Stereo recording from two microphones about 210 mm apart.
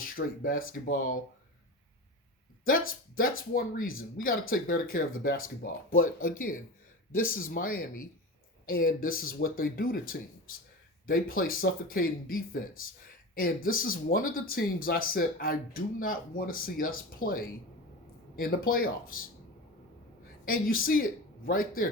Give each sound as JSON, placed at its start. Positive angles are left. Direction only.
{"t": 0.0, "sound": "speech", "side_deg": 40}
{"t": 2.6, "sound": "speech", "side_deg": 40}
{"t": 20.4, "sound": "speech", "side_deg": 40}